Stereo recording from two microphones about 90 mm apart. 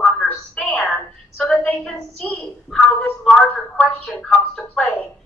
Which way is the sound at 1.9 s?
20° left (ahead or behind).